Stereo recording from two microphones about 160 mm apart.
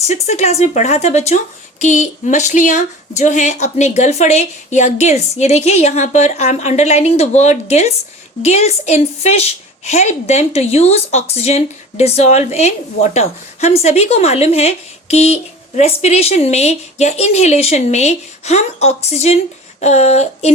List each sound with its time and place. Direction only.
0.1 s a woman's voice: 45° left (ahead or behind)